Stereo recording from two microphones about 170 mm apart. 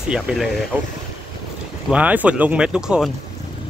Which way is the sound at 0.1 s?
Centre (ahead or behind).